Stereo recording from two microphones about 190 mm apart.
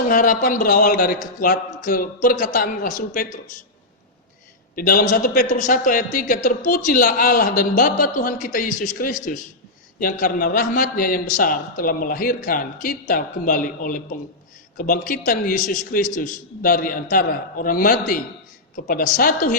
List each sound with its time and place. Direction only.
0.1 s a man's voice: 45° left (ahead or behind)
4.7 s a man's voice: 50° left (ahead or behind)